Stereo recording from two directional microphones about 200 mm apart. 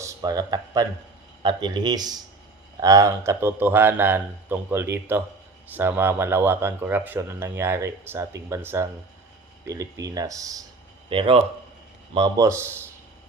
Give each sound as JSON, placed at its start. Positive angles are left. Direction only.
{"t": 0.0, "sound": "speech", "side_deg": -15}